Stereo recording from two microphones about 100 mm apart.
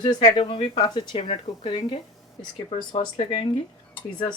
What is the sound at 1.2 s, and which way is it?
Speech, 80° left.